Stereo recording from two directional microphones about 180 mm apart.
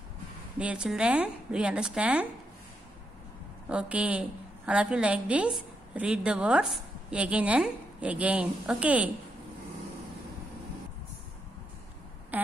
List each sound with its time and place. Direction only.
0.6 s a woman's voice: 5° right (ahead or behind)
3.6 s a woman's voice: 5° right (ahead or behind)